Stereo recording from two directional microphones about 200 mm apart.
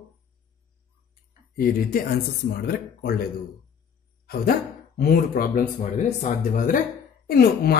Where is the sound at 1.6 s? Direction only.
45° left (ahead or behind).